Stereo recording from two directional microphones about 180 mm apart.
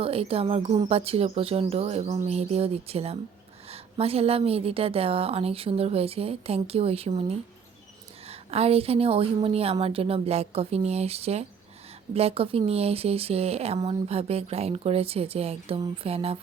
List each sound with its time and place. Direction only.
0.0 s a woman's voice: 30° right (ahead or behind)